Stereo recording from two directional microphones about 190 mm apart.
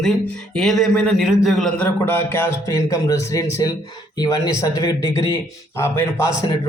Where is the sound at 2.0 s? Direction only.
10° left (ahead or behind).